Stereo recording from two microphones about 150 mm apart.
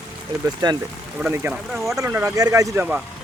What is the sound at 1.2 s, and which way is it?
Speech, 10° right (ahead or behind).